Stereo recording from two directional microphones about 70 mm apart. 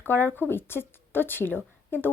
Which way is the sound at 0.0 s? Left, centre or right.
Left.